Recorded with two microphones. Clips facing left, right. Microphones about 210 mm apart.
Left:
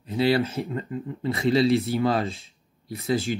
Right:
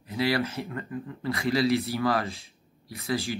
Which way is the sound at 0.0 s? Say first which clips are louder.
Left 5 dB; 30° left (ahead or behind).